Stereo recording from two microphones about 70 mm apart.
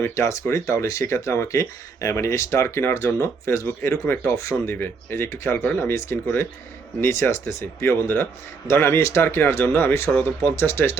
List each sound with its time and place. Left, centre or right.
0.0 s speech: left
4.0 s speech: left